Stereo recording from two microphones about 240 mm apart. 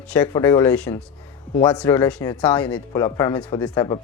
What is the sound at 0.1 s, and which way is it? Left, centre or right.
Speech, centre.